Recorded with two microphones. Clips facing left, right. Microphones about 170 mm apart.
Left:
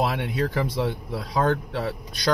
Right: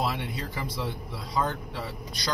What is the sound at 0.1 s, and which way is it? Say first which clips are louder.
Speech: left 8 dB; 70° left (ahead or behind).